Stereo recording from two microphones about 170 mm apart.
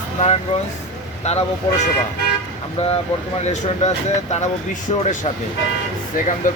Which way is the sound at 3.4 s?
40° left (ahead or behind).